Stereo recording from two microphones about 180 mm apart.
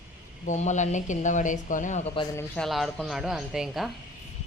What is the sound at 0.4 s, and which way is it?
Speech, 40° left (ahead or behind).